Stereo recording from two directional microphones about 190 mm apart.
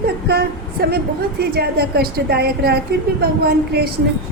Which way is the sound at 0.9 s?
55° right (ahead or behind).